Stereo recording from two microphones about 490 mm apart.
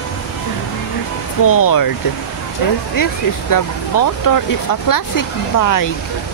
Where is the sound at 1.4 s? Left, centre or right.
Left.